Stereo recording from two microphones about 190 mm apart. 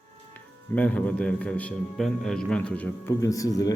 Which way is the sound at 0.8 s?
5° left (ahead or behind).